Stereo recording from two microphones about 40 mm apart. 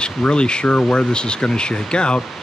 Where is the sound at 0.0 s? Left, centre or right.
Left.